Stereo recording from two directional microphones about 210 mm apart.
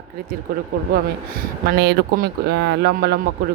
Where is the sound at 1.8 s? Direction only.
50° right (ahead or behind).